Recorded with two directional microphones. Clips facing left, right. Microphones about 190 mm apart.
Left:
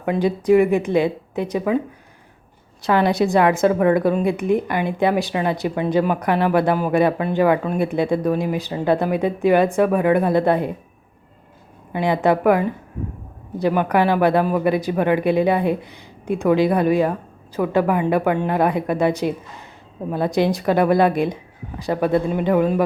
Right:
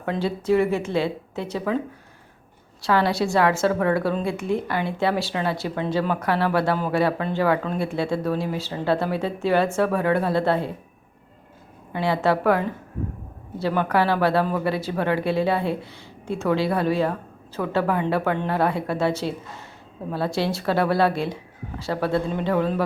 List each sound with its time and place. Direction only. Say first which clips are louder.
0.0 s a woman's voice: left 5 dB; 15° left (ahead or behind)
2.8 s a woman's voice: left 4 dB; 20° left (ahead or behind)
11.9 s a woman's voice: left 4 dB; 15° left (ahead or behind)